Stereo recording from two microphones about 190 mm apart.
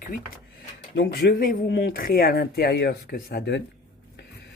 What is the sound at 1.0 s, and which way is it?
Speech, 60° left (ahead or behind).